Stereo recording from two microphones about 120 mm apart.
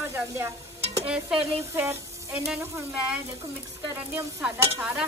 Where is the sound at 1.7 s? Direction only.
20° right (ahead or behind).